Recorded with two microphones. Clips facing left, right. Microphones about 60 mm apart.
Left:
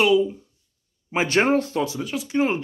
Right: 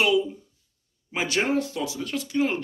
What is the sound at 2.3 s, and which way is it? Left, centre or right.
Speech, left.